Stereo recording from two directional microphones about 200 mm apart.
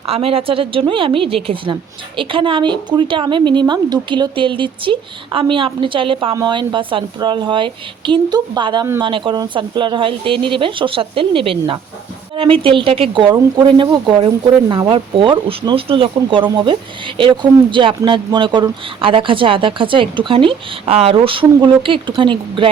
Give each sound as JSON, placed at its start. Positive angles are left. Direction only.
{"t": 0.0, "sound": "a woman's voice", "side_deg": -30}